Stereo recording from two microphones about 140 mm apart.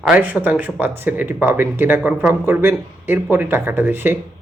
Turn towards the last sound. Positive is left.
turn(degrees=-15)  # may be behind; listen again after turning